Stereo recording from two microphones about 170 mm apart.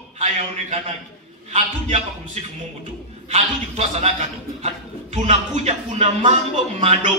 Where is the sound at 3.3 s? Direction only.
40° right (ahead or behind).